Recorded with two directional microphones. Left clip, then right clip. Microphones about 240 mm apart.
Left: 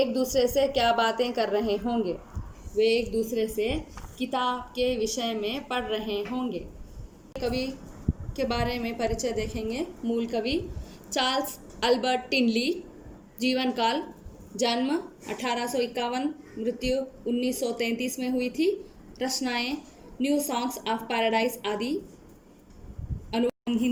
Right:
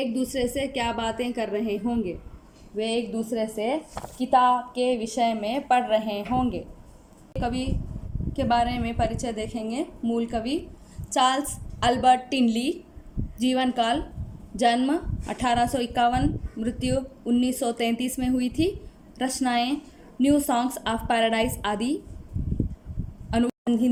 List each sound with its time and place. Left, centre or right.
0.0 s a woman's voice: right
23.6 s speech: right